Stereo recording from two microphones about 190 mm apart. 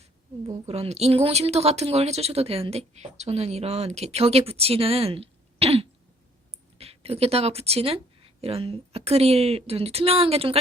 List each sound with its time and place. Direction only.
0.4 s speech: 35° right (ahead or behind)